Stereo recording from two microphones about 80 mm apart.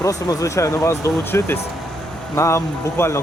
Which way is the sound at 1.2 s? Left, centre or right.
Left.